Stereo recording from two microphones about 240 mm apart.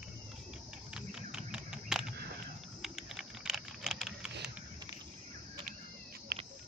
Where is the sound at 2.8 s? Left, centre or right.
Centre.